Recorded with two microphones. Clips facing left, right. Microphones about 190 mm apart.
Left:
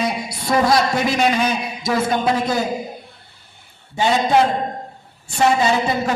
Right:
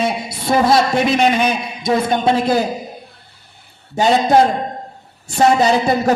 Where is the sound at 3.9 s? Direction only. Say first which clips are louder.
Right 3 dB; 40° right (ahead or behind).